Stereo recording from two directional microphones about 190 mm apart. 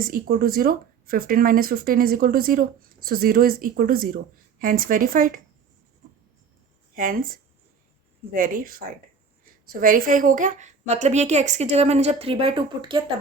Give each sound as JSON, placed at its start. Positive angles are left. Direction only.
{"t": 0.0, "sound": "speech", "side_deg": -50}
{"t": 6.9, "sound": "speech", "side_deg": -50}
{"t": 8.3, "sound": "a woman's voice", "side_deg": -50}